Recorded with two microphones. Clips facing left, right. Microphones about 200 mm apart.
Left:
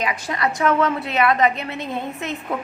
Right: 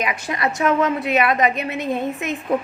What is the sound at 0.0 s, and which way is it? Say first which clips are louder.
A woman's voice: even; 20° right (ahead or behind).